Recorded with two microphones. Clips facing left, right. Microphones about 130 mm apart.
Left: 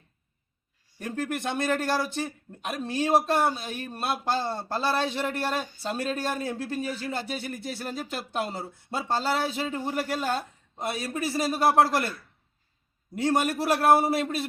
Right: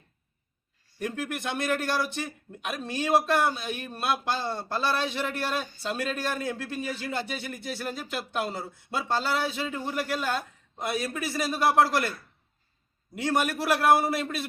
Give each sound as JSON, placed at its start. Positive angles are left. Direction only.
{"t": 0.9, "sound": "speech", "side_deg": 35}
{"t": 13.1, "sound": "speech", "side_deg": 35}